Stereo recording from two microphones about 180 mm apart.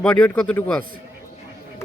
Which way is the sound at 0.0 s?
5° left (ahead or behind).